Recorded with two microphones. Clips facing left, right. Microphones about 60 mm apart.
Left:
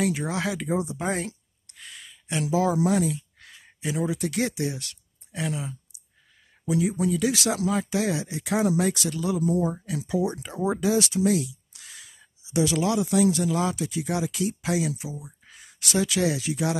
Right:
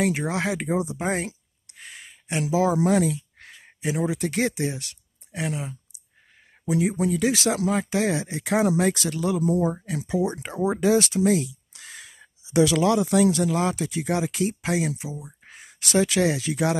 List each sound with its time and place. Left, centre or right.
0.0 s speech: right
1.7 s a sound: right
2.8 s speech: right
3.8 s speech: right
4.1 s speech: right
5.6 s a sound: right
6.7 s speech: right
11.2 s a sound: right
12.5 s speech: right
15.0 s speech: right
15.4 s speech: right